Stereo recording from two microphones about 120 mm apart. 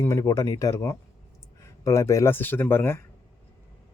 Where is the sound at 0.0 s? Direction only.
25° left (ahead or behind).